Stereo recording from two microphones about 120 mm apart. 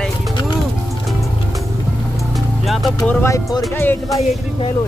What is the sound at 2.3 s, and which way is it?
Music, centre (ahead or behind).